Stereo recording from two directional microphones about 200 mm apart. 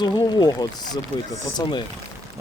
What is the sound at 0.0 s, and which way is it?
Speech, 20° left (ahead or behind).